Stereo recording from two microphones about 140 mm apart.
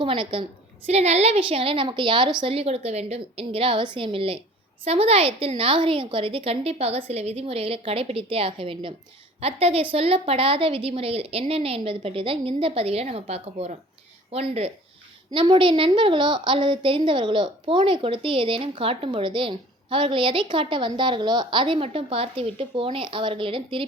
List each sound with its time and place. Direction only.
0.0 s a woman's voice: 40° right (ahead or behind)
0.9 s a woman's voice: 50° right (ahead or behind)